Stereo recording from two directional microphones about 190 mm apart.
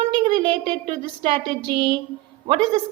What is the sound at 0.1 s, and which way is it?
A woman's voice, 25° right (ahead or behind).